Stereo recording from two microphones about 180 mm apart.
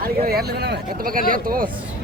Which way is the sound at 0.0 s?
55° right (ahead or behind).